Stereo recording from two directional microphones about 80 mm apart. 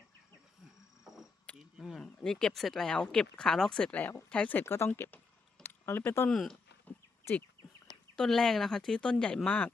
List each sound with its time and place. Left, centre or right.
1.0 s a sound: centre
1.8 s speech: centre
4.6 s speech: left
5.6 s a sound: left
6.1 s speech: left
6.3 s speech: centre
8.1 s speech: centre